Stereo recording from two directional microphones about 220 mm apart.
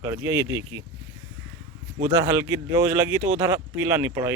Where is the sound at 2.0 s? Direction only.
15° right (ahead or behind).